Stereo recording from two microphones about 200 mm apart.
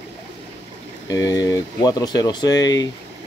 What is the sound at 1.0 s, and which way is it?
Speech, 20° left (ahead or behind).